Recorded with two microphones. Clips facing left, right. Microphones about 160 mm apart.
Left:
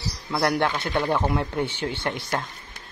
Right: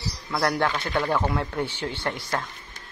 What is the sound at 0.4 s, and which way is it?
Speech, 20° left (ahead or behind).